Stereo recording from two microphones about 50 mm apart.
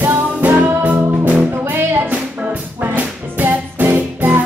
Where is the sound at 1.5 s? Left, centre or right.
Right.